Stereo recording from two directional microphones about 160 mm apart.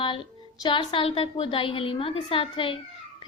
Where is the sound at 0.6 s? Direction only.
30° left (ahead or behind).